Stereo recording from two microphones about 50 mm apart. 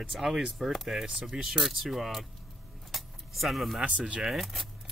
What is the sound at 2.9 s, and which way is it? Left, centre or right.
Keys jangling, centre.